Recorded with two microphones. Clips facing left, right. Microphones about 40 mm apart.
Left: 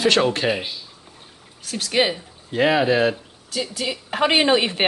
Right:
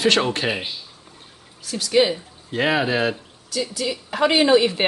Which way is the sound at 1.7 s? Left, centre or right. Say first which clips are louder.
Right 2 dB; left.